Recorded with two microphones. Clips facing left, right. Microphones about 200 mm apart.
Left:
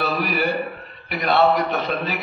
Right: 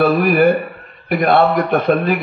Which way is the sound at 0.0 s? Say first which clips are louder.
Right 10 dB; 50° right (ahead or behind).